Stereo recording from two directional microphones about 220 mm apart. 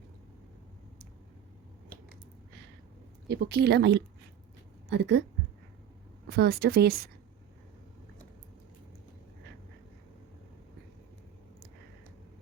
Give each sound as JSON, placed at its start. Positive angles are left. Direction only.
{"t": 3.2, "sound": "a woman's voice", "side_deg": -50}
{"t": 6.2, "sound": "a woman's voice", "side_deg": -45}